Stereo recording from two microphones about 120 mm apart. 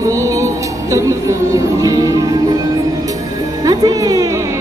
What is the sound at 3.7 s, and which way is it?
Music, 30° right (ahead or behind).